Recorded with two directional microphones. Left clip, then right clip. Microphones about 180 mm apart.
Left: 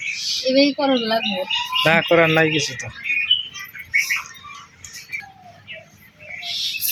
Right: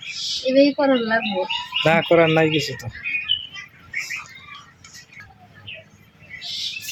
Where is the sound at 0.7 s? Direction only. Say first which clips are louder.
Right 1 dB; 5° left (ahead or behind).